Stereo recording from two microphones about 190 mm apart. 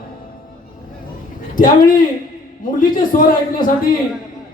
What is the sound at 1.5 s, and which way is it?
A man's voice, 45° left (ahead or behind).